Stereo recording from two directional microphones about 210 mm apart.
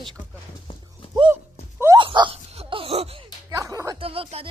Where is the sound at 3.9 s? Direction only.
25° right (ahead or behind).